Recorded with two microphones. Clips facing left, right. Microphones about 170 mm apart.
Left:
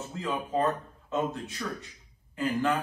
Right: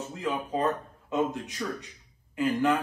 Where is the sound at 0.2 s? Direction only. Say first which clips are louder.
Even; 15° right (ahead or behind).